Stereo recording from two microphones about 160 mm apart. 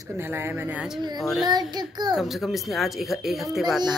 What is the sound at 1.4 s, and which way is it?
Speech, 25° right (ahead or behind).